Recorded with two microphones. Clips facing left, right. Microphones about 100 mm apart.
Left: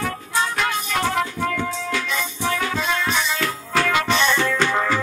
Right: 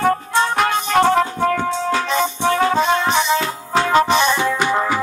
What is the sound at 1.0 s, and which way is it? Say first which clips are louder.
Music: right 7 dB; 35° right (ahead or behind).